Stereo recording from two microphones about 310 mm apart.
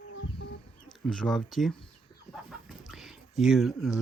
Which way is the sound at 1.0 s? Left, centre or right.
Centre.